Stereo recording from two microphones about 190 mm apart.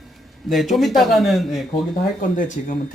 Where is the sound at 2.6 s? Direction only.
45° left (ahead or behind).